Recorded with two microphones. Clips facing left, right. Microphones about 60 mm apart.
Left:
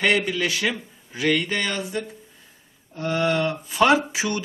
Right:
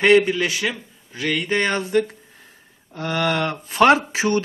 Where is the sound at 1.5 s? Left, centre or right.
Right.